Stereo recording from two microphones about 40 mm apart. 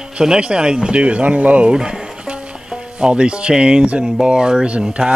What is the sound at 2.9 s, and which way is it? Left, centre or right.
A man's voice, right.